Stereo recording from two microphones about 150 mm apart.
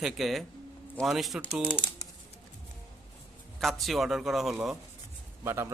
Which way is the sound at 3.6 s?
Centre (ahead or behind).